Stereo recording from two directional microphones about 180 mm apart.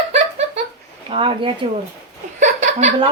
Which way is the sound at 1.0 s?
30° right (ahead or behind).